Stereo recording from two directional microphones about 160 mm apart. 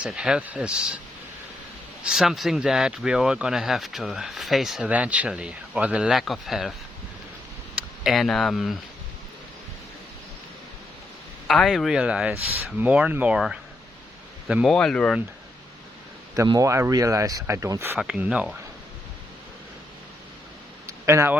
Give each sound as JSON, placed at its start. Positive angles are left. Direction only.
{"t": 0.0, "sound": "speech", "side_deg": -5}
{"t": 2.0, "sound": "speech", "side_deg": 0}
{"t": 8.0, "sound": "speech", "side_deg": 0}
{"t": 11.4, "sound": "speech", "side_deg": 0}
{"t": 16.3, "sound": "speech", "side_deg": -20}
{"t": 17.9, "sound": "speech", "side_deg": -5}
{"t": 20.8, "sound": "a sound", "side_deg": -20}